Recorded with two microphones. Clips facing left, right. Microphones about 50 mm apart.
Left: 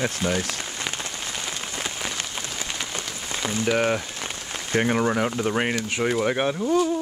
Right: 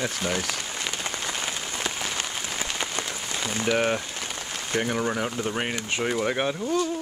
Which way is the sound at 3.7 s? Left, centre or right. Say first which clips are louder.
Left 1 dB; centre.